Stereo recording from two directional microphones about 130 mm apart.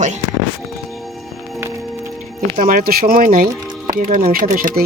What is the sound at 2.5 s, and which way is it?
Speech, 90° right.